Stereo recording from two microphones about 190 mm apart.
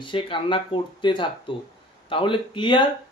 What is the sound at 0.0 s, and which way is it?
Speech, 25° left (ahead or behind).